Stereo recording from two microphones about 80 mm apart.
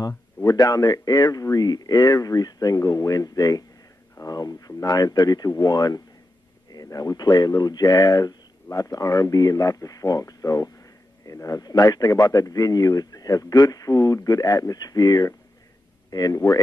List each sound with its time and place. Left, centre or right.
0.6 s speech: left